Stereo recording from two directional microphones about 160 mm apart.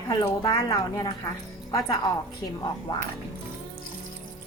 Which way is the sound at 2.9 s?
25° left (ahead or behind).